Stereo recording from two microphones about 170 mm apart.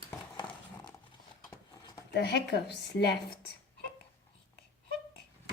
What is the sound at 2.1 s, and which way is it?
A woman's voice, 80° left.